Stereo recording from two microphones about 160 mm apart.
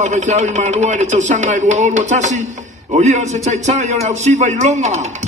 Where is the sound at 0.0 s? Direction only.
50° right (ahead or behind).